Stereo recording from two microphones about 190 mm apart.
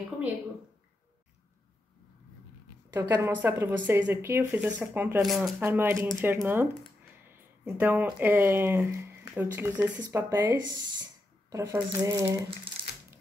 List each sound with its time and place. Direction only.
2.9 s speech: 15° right (ahead or behind)